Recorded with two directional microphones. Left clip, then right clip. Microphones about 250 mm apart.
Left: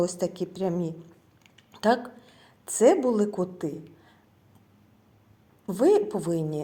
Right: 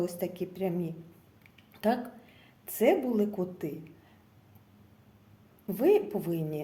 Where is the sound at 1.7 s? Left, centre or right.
Centre.